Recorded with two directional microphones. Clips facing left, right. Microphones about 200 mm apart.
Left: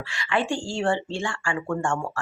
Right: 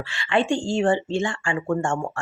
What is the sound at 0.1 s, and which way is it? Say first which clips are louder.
Speech: right 4 dB; 30° right (ahead or behind).